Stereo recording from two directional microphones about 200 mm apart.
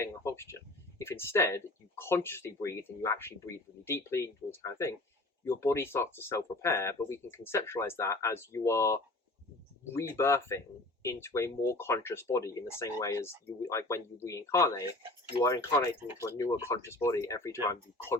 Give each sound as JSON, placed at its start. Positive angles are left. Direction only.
{"t": 0.0, "sound": "speech", "side_deg": 15}